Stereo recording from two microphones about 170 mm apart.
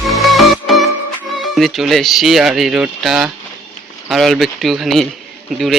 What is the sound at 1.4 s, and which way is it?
Speech, centre (ahead or behind).